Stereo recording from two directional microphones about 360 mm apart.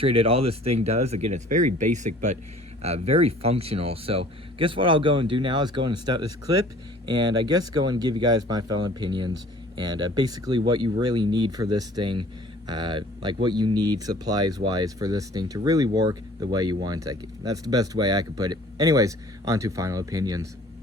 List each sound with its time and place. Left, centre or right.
0.0 s speech: centre